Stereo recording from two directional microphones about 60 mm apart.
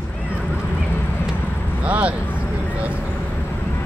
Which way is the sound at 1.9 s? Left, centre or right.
Right.